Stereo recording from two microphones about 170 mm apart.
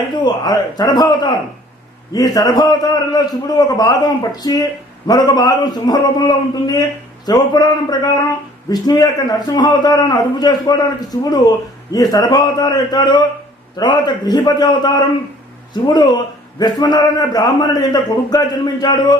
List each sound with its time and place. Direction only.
0.1 s a man's voice: 20° left (ahead or behind)